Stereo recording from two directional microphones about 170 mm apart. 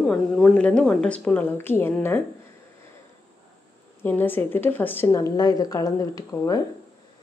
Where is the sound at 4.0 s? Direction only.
10° left (ahead or behind).